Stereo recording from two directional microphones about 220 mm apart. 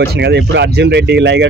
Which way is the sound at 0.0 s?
50° right (ahead or behind).